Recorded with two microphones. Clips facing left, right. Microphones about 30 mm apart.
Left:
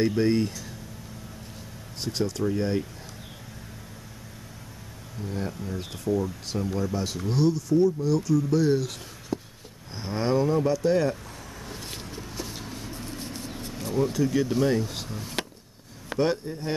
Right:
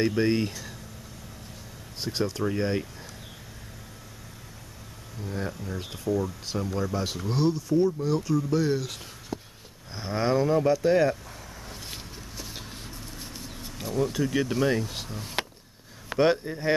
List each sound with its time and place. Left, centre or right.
0.0 s speech: centre
2.0 s speech: centre
5.2 s speech: centre
8.5 s speech: centre
11.6 s a sound: centre
12.9 s vehicle: centre
13.8 s speech: centre
14.3 s speech: centre
16.2 s speech: right